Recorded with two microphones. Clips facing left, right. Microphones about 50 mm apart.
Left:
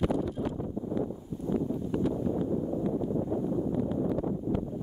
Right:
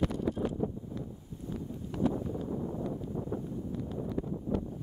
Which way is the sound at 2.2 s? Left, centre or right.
Centre.